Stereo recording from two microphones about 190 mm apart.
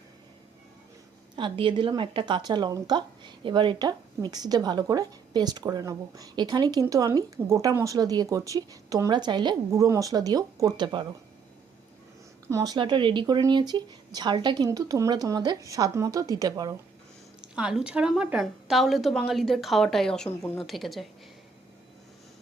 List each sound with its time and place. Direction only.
1.4 s a woman's voice: 25° right (ahead or behind)
12.5 s a woman's voice: 20° right (ahead or behind)
17.4 s a woman's voice: 5° right (ahead or behind)